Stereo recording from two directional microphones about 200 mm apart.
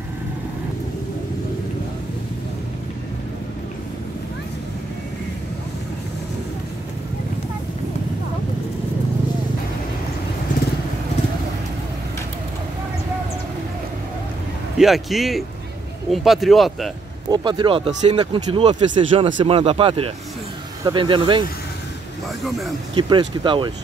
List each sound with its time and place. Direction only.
14.8 s speech: centre (ahead or behind)
17.3 s speech: 25° right (ahead or behind)
22.9 s speech: 25° right (ahead or behind)